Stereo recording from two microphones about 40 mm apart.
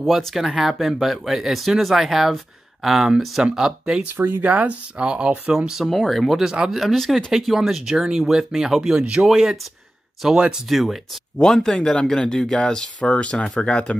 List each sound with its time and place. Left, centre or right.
0.2 s speech: centre
4.2 s speech: right
4.5 s speech: right
4.9 s speech: right
5.9 s speech: centre
6.4 s speech: centre
6.8 s speech: centre
8.9 s speech: right
9.2 s speech: centre
10.2 s speech: centre
10.7 s speech: centre
11.4 s speech: centre
13.1 s speech: left